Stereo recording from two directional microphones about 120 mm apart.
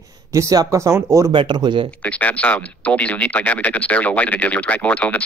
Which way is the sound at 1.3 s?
40° right (ahead or behind).